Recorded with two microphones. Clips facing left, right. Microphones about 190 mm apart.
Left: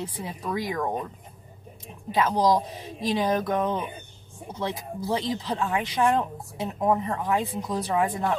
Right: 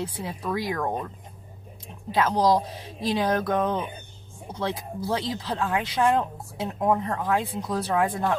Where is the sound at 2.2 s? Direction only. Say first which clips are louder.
Right 1 dB; 15° left (ahead or behind).